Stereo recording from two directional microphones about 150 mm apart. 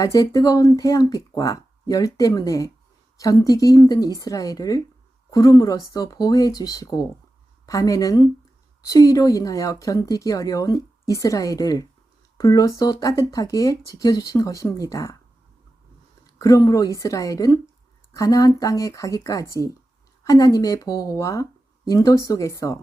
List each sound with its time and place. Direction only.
0.0 s speech: 25° left (ahead or behind)
16.2 s speech: 25° left (ahead or behind)